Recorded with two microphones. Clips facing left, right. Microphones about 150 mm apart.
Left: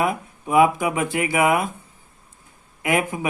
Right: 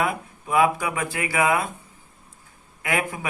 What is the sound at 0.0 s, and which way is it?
A man's voice, 15° left (ahead or behind).